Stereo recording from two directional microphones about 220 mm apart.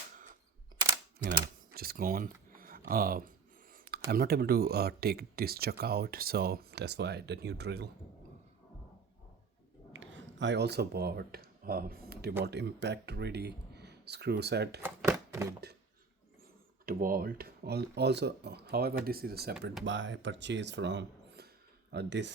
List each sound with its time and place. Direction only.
1.2 s speech: 45° right (ahead or behind)
9.9 s speech: 55° right (ahead or behind)
14.8 s a sound: 10° right (ahead or behind)
16.8 s speech: 40° right (ahead or behind)
19.8 s speech: 55° right (ahead or behind)